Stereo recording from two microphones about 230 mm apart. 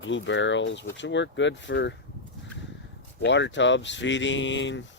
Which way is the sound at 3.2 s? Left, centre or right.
Left.